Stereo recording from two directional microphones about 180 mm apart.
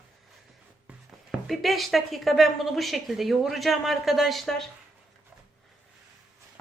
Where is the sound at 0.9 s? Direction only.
Centre (ahead or behind).